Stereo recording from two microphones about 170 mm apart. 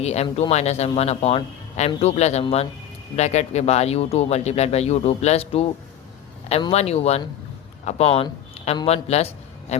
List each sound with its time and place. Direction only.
0.0 s a man's voice: 40° left (ahead or behind)